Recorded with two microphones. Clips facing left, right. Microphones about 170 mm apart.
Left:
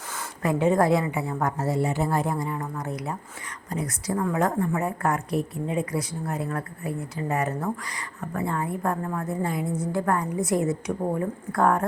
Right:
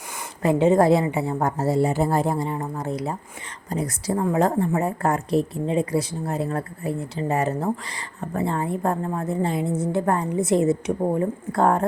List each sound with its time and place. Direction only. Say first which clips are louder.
0.4 s a woman's voice: right 4 dB; 25° right (ahead or behind)